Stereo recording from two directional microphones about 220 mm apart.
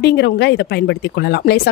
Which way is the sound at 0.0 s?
50° left (ahead or behind).